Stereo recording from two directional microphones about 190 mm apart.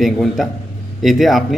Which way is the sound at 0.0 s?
Centre (ahead or behind).